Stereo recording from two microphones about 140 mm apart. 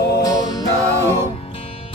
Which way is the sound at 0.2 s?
30° left (ahead or behind).